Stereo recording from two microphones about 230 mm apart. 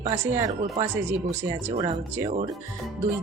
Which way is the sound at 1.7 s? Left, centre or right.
Right.